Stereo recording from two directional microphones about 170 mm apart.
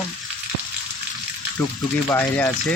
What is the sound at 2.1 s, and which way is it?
Speech, 10° left (ahead or behind).